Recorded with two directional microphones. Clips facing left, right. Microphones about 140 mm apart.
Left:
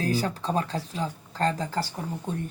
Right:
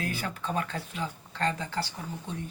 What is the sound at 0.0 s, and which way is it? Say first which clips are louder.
Speech: left 7 dB; 35° left (ahead or behind).